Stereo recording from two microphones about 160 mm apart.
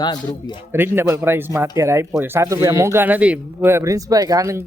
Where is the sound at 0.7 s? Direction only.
15° right (ahead or behind).